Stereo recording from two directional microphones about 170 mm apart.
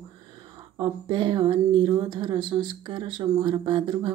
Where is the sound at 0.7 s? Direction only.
30° right (ahead or behind).